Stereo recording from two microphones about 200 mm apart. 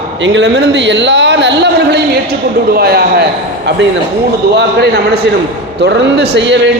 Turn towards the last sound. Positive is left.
turn(degrees=-65)  # may be behind; listen again after turning